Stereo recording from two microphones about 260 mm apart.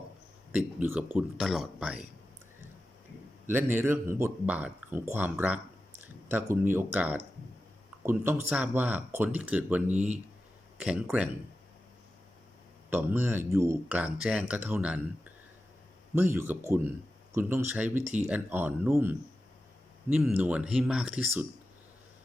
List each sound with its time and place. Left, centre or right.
0.5 s speech: centre
3.4 s speech: centre
12.9 s speech: centre